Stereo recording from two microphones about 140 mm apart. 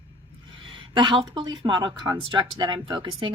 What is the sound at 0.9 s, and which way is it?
Speech, 35° right (ahead or behind).